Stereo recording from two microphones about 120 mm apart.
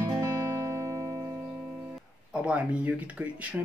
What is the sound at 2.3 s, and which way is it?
Speech, 10° right (ahead or behind).